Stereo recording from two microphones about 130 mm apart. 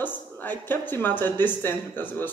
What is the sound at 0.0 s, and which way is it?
Speech, 15° left (ahead or behind).